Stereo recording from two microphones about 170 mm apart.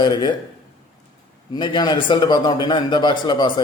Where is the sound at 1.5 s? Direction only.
25° left (ahead or behind).